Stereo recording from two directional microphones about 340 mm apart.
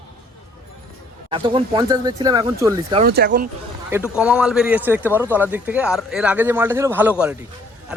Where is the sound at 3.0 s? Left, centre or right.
Right.